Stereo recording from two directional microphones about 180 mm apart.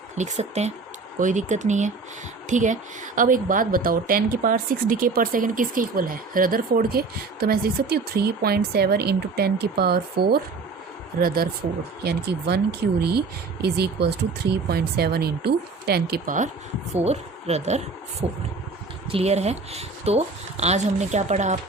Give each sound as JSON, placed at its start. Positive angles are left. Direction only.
{"t": 0.2, "sound": "speech", "side_deg": -40}
{"t": 16.9, "sound": "speech", "side_deg": -35}